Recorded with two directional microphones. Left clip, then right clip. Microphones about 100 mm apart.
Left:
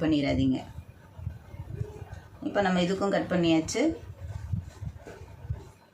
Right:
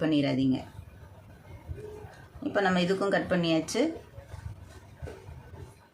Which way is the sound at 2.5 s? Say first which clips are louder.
Even; 40° right (ahead or behind).